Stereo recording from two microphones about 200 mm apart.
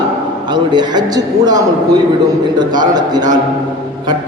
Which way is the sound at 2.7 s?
20° right (ahead or behind).